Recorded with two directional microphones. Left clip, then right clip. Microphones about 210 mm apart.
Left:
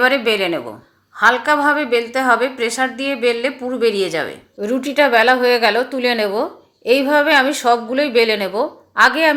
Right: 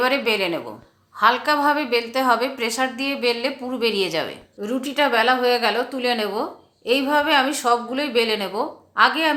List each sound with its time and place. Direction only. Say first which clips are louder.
0.0 s a woman's voice: left 5 dB; 15° left (ahead or behind)